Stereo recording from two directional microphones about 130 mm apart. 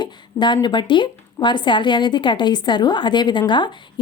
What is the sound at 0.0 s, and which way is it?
A woman's voice, 35° left (ahead or behind).